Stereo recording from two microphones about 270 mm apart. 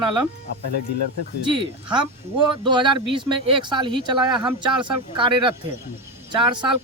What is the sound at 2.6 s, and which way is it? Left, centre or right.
Speech, centre.